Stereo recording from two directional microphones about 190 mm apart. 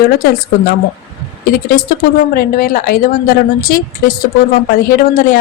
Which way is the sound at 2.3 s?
50° left (ahead or behind).